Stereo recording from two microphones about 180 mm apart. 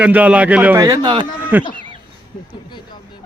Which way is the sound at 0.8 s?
20° right (ahead or behind).